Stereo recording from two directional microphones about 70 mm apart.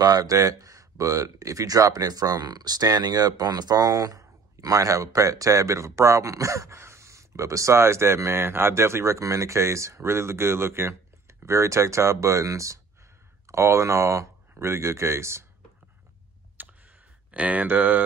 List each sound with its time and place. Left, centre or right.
0.0 s speech: right
16.6 s a sound: right
17.3 s speech: right